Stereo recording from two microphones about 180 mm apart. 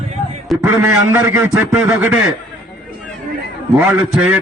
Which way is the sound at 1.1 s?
10° right (ahead or behind).